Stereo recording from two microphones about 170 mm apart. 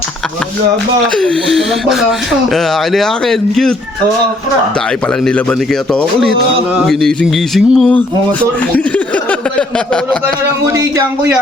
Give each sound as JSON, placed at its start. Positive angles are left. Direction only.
{"t": 1.0, "sound": "speech", "side_deg": 5}
{"t": 5.2, "sound": "speech", "side_deg": 5}
{"t": 6.7, "sound": "a sound", "side_deg": 0}
{"t": 10.7, "sound": "speech", "side_deg": -15}